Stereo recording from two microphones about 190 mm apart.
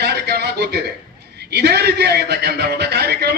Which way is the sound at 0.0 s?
60° right (ahead or behind).